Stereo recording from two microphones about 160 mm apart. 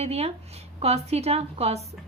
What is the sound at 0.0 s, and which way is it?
A woman's voice, 40° right (ahead or behind).